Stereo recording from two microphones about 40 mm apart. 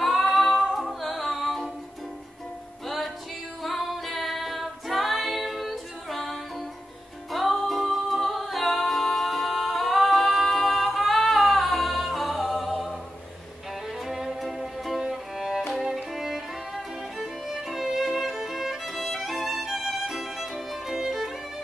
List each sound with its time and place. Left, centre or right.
0.2 s music: centre
3.6 s music: centre
7.3 s music: centre
14.0 s music: centre
16.2 s violin: centre
17.8 s music: centre